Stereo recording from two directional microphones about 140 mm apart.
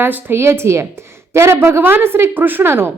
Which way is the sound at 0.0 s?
15° right (ahead or behind).